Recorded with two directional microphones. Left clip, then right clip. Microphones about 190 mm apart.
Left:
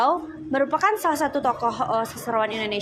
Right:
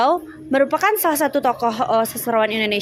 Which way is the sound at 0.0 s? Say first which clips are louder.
Right 4 dB; 50° right (ahead or behind).